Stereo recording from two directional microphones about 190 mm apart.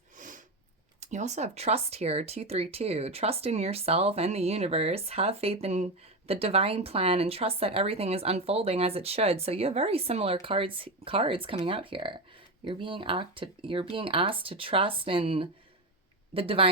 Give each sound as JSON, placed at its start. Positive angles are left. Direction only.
{"t": 0.2, "sound": "sniff", "side_deg": -45}
{"t": 0.9, "sound": "speech", "side_deg": -35}